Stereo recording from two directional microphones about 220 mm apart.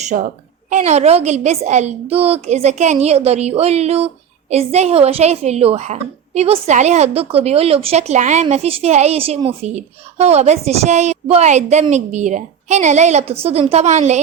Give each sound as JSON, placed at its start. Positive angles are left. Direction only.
{"t": 0.0, "sound": "a woman's voice", "side_deg": -35}